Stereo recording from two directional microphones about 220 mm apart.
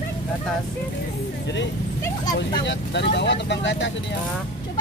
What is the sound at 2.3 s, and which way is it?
Speech, 50° left (ahead or behind).